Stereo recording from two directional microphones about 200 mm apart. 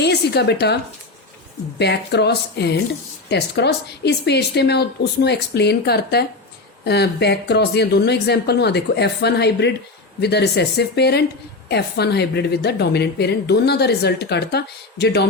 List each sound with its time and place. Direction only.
0.0 s a woman's voice: 55° left (ahead or behind)
1.8 s a woman's voice: 55° left (ahead or behind)